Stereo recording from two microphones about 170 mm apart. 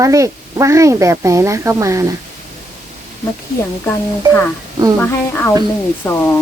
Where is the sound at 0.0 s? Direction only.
20° right (ahead or behind).